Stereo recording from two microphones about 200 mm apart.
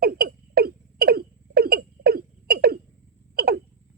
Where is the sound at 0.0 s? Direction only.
50° right (ahead or behind).